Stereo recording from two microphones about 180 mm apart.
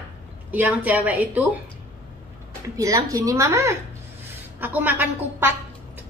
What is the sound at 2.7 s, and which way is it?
A woman's voice, 20° right (ahead or behind).